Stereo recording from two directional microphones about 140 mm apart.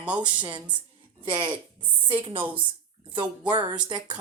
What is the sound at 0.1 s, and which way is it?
Speech, 35° right (ahead or behind).